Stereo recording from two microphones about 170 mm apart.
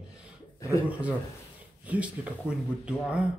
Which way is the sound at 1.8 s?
5° right (ahead or behind).